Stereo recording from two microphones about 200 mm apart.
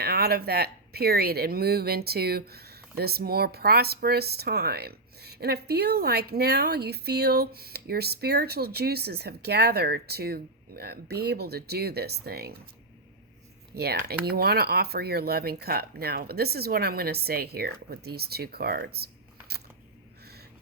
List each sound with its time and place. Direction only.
0.0 s speech: 50° right (ahead or behind)
13.7 s speech: 50° right (ahead or behind)